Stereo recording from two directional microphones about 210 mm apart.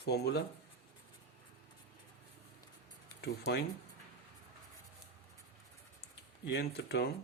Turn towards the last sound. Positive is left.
turn(degrees=50)  # may be behind; listen again after turning